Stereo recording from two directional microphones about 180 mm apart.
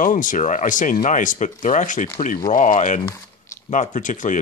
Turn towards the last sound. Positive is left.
turn(degrees=45)  # may be behind; listen again after turning